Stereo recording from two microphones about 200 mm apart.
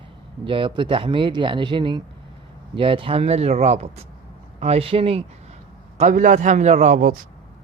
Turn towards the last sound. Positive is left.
turn(degrees=-40)  # may be behind; listen again after turning